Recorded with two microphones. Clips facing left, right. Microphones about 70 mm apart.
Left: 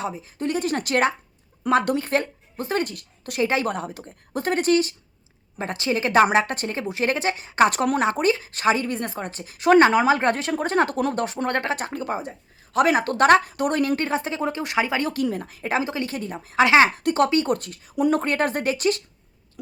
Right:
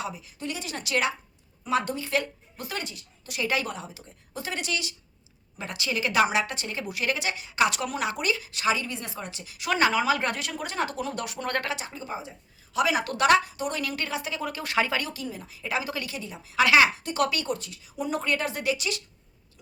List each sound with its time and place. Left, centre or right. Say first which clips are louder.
0.0 s speech: left 7 dB; left
1.6 s a woman's voice: left 7 dB; left
2.8 s a woman's voice: left 8 dB; left
3.4 s a woman's voice: left 6 dB; left
3.7 s speech: left 9 dB; left
11.8 s speech: left 8 dB; left
15.0 s speech: left 11 dB; left
15.8 s a woman's voice: left 6 dB; left
16.1 s speech: left 7 dB; left
16.6 s speech: left 4 dB; left
16.9 s speech: left 11 dB; left
17.2 s speech: left 6 dB; left
17.4 s speech: left 7 dB; left